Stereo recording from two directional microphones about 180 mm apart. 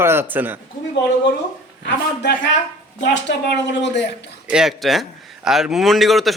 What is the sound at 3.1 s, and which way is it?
Speech, 80° left.